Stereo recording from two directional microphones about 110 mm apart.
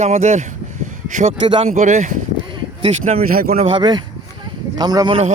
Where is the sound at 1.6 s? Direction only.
90° right.